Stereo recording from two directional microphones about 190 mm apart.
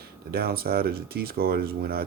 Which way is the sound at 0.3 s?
55° right (ahead or behind).